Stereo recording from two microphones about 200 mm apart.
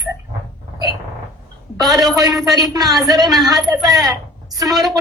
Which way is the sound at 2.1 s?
20° right (ahead or behind).